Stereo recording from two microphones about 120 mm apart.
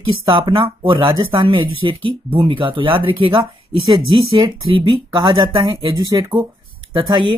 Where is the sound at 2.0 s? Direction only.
50° right (ahead or behind).